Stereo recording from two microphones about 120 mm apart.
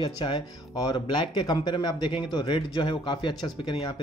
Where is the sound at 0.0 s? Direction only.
45° left (ahead or behind).